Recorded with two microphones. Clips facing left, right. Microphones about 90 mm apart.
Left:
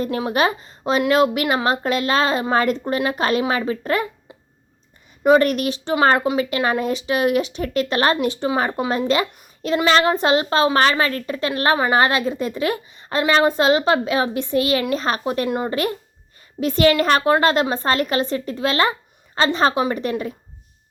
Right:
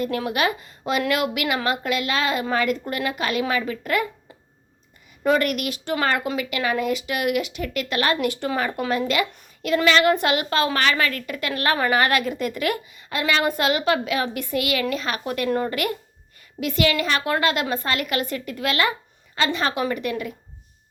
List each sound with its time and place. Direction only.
0.0 s a woman's voice: 30° left (ahead or behind)
5.4 s a woman's voice: 35° left (ahead or behind)
6.3 s a woman's voice: 35° left (ahead or behind)
8.5 s a woman's voice: 30° left (ahead or behind)
15.2 s a woman's voice: 25° left (ahead or behind)
15.7 s a woman's voice: 30° left (ahead or behind)